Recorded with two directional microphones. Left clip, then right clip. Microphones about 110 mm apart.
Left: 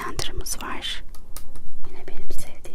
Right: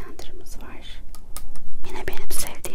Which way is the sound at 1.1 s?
10° right (ahead or behind).